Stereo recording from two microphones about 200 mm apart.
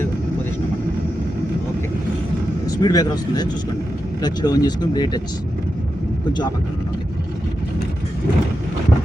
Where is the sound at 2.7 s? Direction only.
20° left (ahead or behind).